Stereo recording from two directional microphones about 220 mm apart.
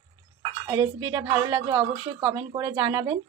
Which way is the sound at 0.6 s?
20° right (ahead or behind).